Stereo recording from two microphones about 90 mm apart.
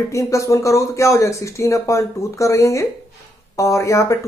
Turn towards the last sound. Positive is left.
turn(degrees=35)  # may be behind; listen again after turning